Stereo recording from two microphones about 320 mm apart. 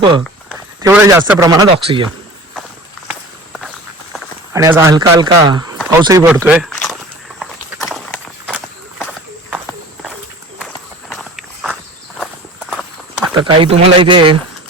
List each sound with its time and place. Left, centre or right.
0.8 s a man's voice: centre
3.1 s walk: centre
4.5 s a man's voice: centre
6.0 s walk: centre
8.4 s horse: centre
11.1 s walk: centre
13.3 s a man's voice: centre